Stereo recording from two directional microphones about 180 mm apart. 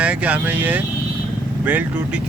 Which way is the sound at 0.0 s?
5° right (ahead or behind).